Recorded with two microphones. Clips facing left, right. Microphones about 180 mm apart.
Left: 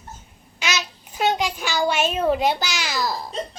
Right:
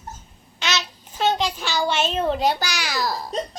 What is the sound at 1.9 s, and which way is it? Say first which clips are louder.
Speech: left 2 dB; 10° left (ahead or behind).